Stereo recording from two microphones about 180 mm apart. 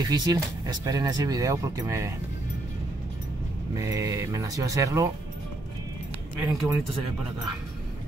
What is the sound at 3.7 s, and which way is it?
Speech, 20° right (ahead or behind).